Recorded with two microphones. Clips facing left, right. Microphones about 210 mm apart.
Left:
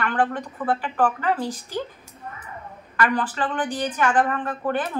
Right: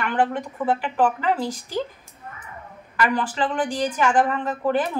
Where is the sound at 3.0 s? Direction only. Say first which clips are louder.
Right 1 dB; 10° right (ahead or behind).